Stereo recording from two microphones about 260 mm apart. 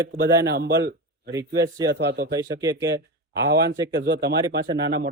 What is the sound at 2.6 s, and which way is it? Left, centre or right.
Speech, centre.